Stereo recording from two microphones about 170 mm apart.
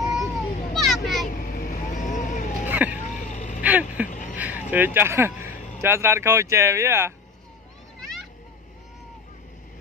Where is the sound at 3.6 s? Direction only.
10° right (ahead or behind).